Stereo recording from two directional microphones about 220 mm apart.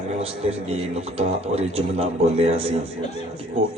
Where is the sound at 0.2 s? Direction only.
25° right (ahead or behind).